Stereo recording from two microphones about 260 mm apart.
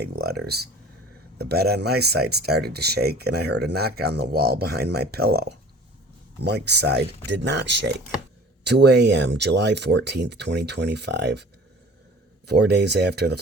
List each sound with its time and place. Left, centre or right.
0.0 s speech: right
12.5 s speech: right